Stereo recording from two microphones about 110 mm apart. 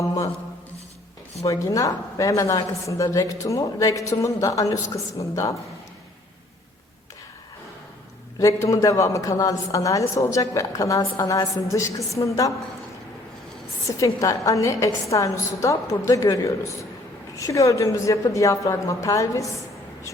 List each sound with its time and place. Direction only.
1.5 s a woman's voice: 30° left (ahead or behind)
8.4 s a woman's voice: 30° left (ahead or behind)
13.8 s a woman's voice: 30° left (ahead or behind)